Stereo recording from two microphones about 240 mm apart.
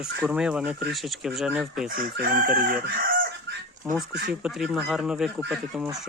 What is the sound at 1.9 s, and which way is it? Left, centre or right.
Chicken, right.